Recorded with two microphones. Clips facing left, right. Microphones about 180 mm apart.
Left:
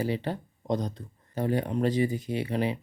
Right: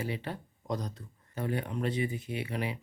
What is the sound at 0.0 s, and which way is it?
Speech, 30° left (ahead or behind).